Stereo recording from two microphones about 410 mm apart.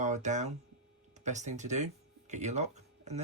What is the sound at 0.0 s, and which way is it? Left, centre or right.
Speech, centre.